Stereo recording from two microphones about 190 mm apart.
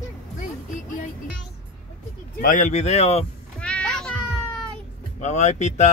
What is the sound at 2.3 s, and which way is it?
Speech, 45° left (ahead or behind).